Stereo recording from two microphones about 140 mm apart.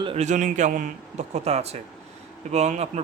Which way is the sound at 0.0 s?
40° right (ahead or behind).